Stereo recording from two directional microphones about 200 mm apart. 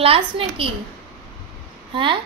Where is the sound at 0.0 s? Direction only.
30° right (ahead or behind).